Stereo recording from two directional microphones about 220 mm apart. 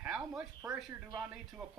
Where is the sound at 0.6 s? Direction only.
15° right (ahead or behind).